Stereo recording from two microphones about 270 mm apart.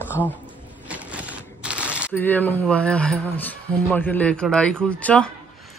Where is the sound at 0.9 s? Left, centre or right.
Centre.